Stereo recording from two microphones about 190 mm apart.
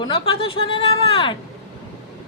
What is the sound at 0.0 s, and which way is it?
A woman's voice, 25° left (ahead or behind).